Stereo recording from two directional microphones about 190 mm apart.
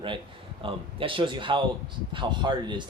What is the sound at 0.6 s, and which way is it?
Speech, 30° right (ahead or behind).